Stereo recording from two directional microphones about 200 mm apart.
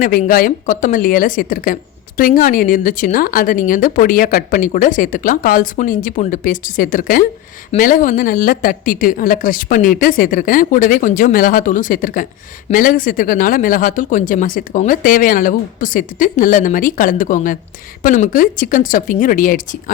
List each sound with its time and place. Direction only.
0.0 s a woman's voice: 45° left (ahead or behind)